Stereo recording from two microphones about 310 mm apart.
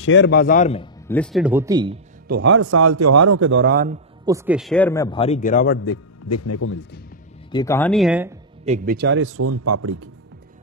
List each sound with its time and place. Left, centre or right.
0.0 s a man's voice: left
1.0 s speech: centre
2.2 s speech: right
3.4 s a man's voice: right
4.3 s speech: centre; by 5.8 s left
5.8 s speech: left
7.5 s speech: centre
8.6 s a man's voice: right